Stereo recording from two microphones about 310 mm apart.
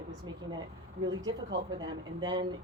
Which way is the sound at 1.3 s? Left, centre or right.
Right.